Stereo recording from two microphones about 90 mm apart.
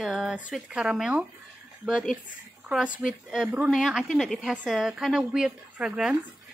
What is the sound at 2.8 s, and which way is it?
Speech, 10° right (ahead or behind).